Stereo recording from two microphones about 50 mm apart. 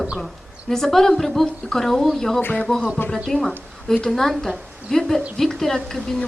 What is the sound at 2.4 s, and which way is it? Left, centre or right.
Speech, left.